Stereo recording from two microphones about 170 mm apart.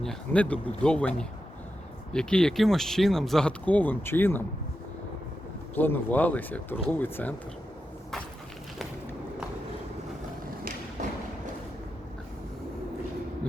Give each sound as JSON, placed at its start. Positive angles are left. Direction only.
{"t": 0.0, "sound": "speech", "side_deg": 5}
{"t": 5.7, "sound": "speech", "side_deg": 10}